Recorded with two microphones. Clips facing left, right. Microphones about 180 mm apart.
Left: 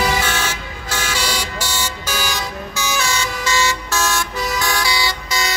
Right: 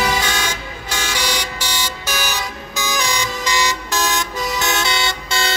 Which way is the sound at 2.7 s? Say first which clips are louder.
Right 1 dB; 15° right (ahead or behind).